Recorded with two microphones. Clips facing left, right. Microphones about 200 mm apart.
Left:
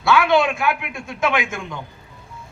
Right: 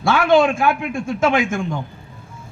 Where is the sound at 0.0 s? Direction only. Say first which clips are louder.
Right 2 dB; 50° right (ahead or behind).